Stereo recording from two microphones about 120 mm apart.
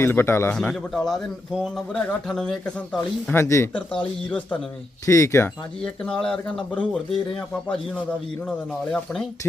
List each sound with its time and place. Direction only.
0.0 s speech: 20° left (ahead or behind)
0.5 s speech: 5° left (ahead or behind)
3.3 s speech: 25° left (ahead or behind)
4.0 s speech: 10° left (ahead or behind)
5.0 s speech: 25° left (ahead or behind)
5.8 s speech: 5° left (ahead or behind)
8.4 s speech: 5° left (ahead or behind)